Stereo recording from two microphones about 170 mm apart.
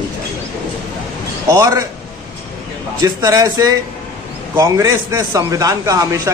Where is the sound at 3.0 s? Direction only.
20° right (ahead or behind).